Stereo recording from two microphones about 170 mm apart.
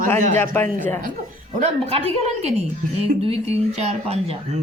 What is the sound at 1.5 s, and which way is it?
Speech, 40° right (ahead or behind).